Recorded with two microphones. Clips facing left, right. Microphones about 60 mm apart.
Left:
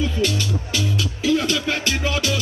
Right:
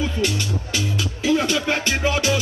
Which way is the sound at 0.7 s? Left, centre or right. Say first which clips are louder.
Left 1 dB; right.